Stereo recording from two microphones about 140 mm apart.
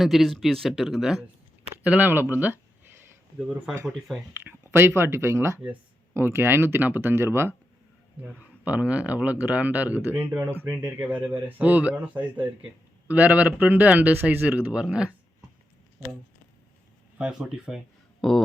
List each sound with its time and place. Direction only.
0.0 s speech: centre (ahead or behind)
1.8 s a sound: 10° right (ahead or behind)
3.3 s speech: 5° right (ahead or behind)
4.4 s a sound: 20° right (ahead or behind)
4.9 s speech: 20° right (ahead or behind)
17.2 s speech: 5° right (ahead or behind)